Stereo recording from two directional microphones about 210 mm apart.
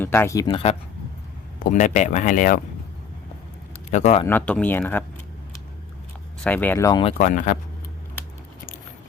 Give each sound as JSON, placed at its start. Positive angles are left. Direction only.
{"t": 0.0, "sound": "speech", "side_deg": 10}
{"t": 0.4, "sound": "speech", "side_deg": 30}
{"t": 3.9, "sound": "speech", "side_deg": 30}
{"t": 4.3, "sound": "speech", "side_deg": 10}
{"t": 6.4, "sound": "speech", "side_deg": 10}
{"t": 7.0, "sound": "speech", "side_deg": 35}